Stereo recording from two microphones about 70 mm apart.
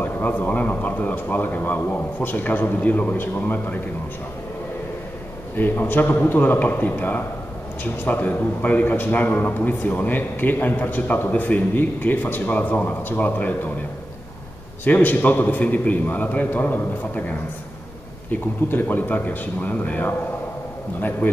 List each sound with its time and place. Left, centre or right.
0.0 s a man's voice: left
5.6 s a man's voice: left
14.9 s a man's voice: left